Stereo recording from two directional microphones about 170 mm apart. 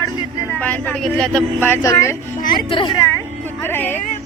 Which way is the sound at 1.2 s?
5° left (ahead or behind).